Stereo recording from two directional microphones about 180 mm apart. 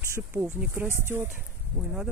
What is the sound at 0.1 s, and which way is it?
Speech, 10° right (ahead or behind).